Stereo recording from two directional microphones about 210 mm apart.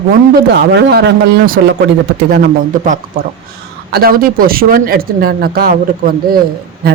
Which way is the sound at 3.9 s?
45° right (ahead or behind).